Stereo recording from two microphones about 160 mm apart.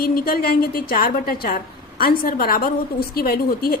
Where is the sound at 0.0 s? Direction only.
65° left (ahead or behind).